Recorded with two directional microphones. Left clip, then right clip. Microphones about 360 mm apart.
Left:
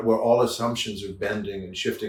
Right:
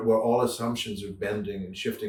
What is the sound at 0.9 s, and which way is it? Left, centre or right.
Speech, centre.